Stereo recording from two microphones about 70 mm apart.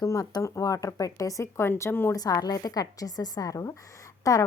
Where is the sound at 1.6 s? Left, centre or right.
Left.